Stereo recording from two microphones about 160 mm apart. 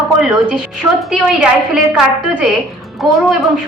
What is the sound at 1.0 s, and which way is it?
Speech, 5° right (ahead or behind).